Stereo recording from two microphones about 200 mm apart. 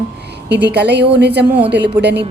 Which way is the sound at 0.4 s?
55° right (ahead or behind).